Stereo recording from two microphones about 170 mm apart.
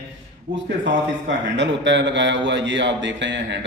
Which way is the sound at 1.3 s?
90° right.